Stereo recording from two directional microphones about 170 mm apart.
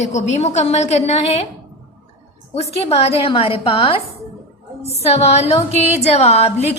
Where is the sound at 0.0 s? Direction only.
45° left (ahead or behind).